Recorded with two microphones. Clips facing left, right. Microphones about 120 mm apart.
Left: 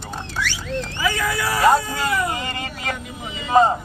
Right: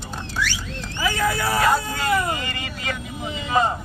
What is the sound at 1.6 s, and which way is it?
Speech, 25° left (ahead or behind).